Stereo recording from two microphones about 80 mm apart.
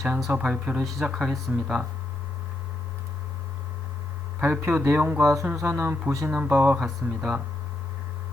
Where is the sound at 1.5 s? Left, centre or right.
Centre.